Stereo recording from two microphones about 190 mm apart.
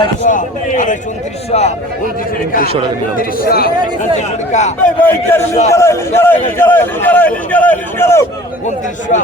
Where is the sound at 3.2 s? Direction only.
50° left (ahead or behind).